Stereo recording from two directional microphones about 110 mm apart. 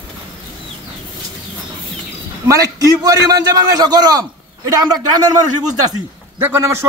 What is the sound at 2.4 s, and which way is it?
A man's voice, 35° right (ahead or behind).